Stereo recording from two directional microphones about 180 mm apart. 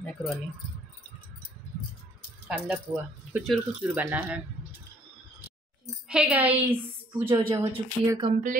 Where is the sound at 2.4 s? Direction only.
10° right (ahead or behind).